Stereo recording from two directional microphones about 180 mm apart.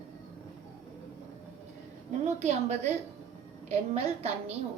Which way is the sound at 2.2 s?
40° right (ahead or behind).